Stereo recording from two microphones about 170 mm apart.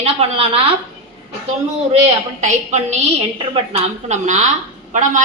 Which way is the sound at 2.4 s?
45° right (ahead or behind).